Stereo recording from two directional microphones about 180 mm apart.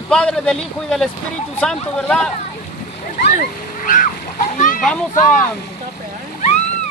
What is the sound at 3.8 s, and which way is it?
A child's voice, 45° left (ahead or behind).